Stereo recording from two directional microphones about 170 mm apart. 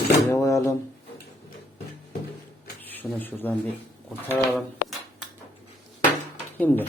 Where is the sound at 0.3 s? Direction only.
20° left (ahead or behind).